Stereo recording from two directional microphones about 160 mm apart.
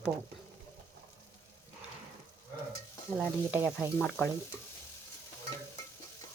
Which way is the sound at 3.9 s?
10° left (ahead or behind).